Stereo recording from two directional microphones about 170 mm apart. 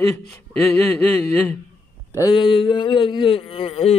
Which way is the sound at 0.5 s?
10° left (ahead or behind).